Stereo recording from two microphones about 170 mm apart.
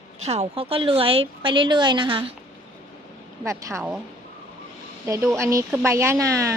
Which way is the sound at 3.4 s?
15° right (ahead or behind).